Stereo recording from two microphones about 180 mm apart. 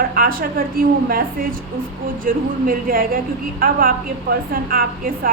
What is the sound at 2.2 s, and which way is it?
A woman's voice, 50° right (ahead or behind).